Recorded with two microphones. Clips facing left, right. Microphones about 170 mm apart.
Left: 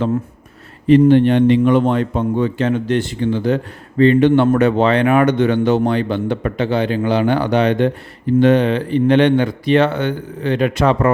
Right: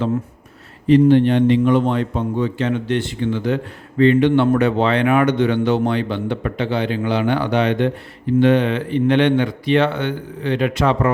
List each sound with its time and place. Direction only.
0.9 s a man's voice: 55° left (ahead or behind)